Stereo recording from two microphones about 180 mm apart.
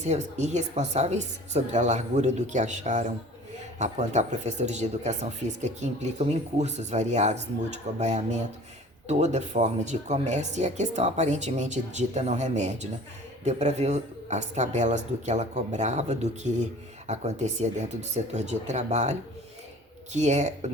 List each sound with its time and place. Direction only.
0.0 s speech: 40° right (ahead or behind)
20.1 s speech: 40° right (ahead or behind)